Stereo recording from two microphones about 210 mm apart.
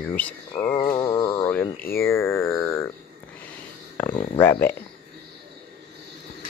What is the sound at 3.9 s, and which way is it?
Speech, 10° left (ahead or behind).